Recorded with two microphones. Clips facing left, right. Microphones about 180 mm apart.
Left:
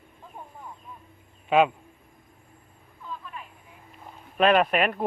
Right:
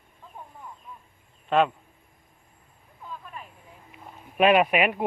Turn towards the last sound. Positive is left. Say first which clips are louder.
# right 1 dB
turn(degrees=-10)  # may be behind; listen again after turning